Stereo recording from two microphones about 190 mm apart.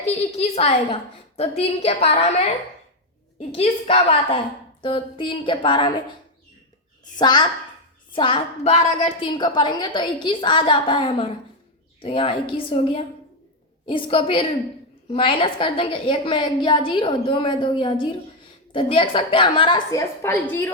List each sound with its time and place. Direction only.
0.0 s a woman's voice: 35° left (ahead or behind)
3.5 s a woman's voice: 30° left (ahead or behind)
7.0 s a woman's voice: 20° left (ahead or behind)